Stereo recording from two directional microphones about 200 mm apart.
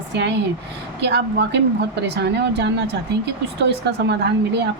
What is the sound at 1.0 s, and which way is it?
A woman's voice, 60° right (ahead or behind).